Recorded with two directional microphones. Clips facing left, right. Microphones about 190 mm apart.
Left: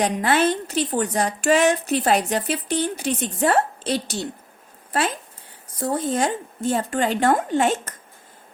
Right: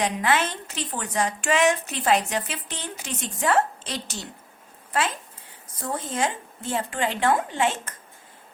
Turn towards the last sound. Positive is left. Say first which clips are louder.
# left 5 dB
turn(degrees=40)  # may be behind; listen again after turning